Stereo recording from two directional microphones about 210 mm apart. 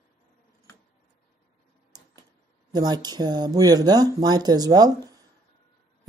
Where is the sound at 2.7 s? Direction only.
20° right (ahead or behind).